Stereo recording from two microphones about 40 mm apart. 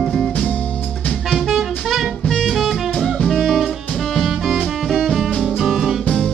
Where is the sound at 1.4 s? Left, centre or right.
Centre.